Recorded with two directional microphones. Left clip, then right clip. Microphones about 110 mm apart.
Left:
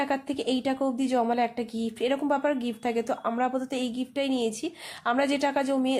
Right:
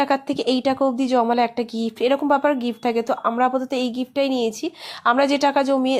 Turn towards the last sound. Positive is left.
turn(degrees=-20)  # may be behind; listen again after turning